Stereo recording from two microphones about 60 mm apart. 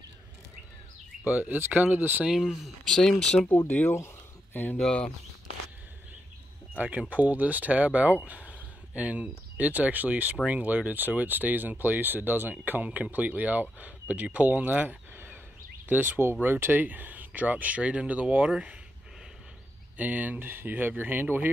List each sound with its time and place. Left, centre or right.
1.2 s speech: right
2.3 s speech: centre
2.9 s speech: centre
3.5 s speech: left
4.7 s speech: centre
7.1 s speech: right
20.0 s speech: right